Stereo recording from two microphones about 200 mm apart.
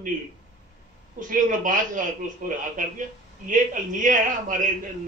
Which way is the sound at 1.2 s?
40° right (ahead or behind).